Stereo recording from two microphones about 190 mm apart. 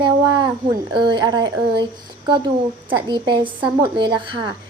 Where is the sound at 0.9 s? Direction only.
25° right (ahead or behind).